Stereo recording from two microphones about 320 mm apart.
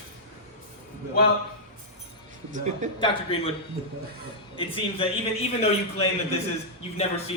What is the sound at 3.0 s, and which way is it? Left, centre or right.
Speech, centre.